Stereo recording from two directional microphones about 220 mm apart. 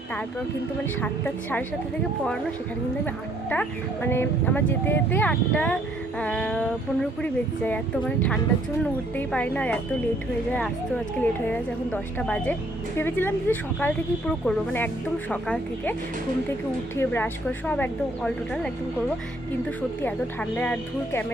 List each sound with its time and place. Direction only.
1.0 s speech: 5° left (ahead or behind)
3.5 s speech: 10° left (ahead or behind)
20.0 s speech: 10° left (ahead or behind)